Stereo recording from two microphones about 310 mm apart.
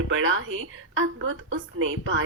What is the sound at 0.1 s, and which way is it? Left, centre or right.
A woman's voice, right.